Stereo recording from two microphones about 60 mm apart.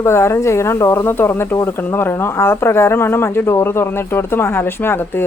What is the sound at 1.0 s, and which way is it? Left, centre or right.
Speech, left.